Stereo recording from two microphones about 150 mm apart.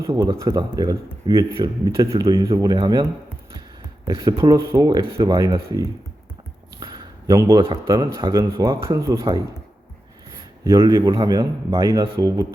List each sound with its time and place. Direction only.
0.0 s speech: 20° right (ahead or behind)
6.7 s a sound: 25° right (ahead or behind)
7.9 s speech: 20° right (ahead or behind)
10.6 s speech: 20° right (ahead or behind)